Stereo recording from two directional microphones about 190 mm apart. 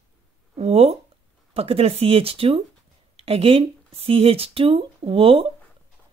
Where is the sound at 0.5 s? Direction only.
35° right (ahead or behind).